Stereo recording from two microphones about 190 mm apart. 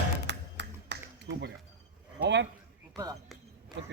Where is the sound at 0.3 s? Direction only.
65° right (ahead or behind).